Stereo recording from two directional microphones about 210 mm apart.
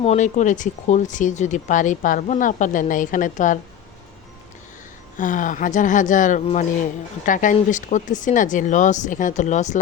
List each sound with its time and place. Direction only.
0.0 s speech: 30° left (ahead or behind)
5.1 s speech: 40° left (ahead or behind)